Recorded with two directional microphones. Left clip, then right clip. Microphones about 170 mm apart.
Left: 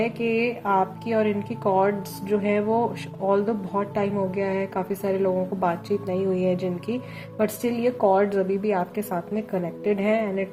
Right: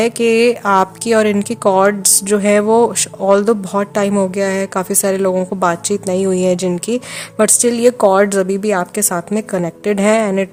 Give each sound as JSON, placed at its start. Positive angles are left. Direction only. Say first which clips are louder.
{"t": 0.0, "sound": "a woman's voice", "louder": "right 12 dB", "side_deg": -55}